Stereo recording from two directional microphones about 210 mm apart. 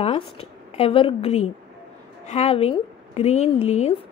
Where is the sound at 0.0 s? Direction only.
30° left (ahead or behind).